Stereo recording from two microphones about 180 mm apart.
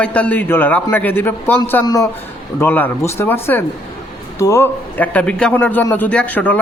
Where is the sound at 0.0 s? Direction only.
10° left (ahead or behind).